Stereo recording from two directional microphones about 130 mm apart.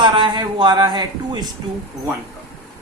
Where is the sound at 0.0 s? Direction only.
35° right (ahead or behind).